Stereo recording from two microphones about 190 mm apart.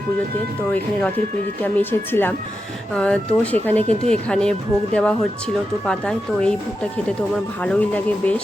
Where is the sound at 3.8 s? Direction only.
35° right (ahead or behind).